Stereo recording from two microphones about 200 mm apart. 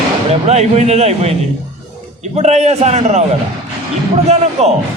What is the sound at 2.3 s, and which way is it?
Speech, 35° right (ahead or behind).